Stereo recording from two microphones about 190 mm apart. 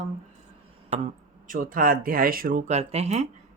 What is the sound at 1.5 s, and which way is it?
Speech, 45° right (ahead or behind).